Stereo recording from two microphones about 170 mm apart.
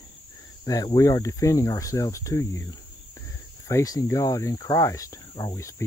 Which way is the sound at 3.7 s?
20° left (ahead or behind).